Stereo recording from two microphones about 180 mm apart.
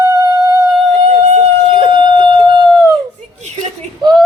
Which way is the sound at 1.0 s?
35° right (ahead or behind).